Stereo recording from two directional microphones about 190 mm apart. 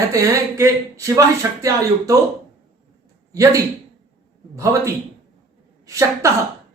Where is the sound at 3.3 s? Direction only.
15° right (ahead or behind).